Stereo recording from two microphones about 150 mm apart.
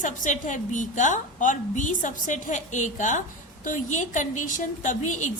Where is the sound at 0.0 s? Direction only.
55° left (ahead or behind).